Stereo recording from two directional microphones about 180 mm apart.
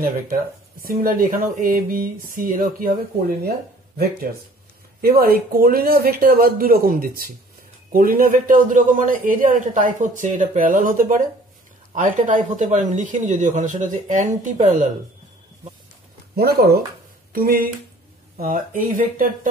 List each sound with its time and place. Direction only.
0.8 s speech: 50° right (ahead or behind)
5.0 s speech: 55° right (ahead or behind)
16.3 s speech: 60° right (ahead or behind)